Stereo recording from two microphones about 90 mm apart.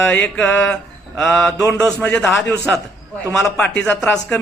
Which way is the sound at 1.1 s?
5° left (ahead or behind).